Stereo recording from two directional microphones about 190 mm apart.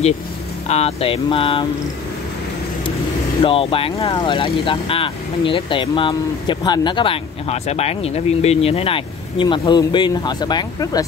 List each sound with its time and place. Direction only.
0.7 s speech: 35° left (ahead or behind)
3.4 s speech: 30° left (ahead or behind)